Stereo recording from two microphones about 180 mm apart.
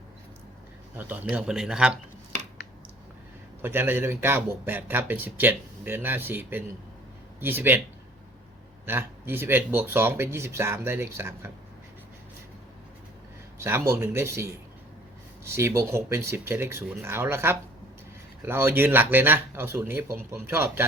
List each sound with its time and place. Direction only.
0.9 s speech: 10° right (ahead or behind)
3.6 s a man's voice: 10° right (ahead or behind)
8.9 s a man's voice: 10° right (ahead or behind)
13.6 s a man's voice: 15° right (ahead or behind)